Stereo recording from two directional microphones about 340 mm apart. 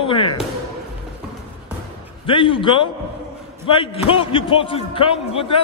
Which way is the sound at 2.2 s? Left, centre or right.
Centre.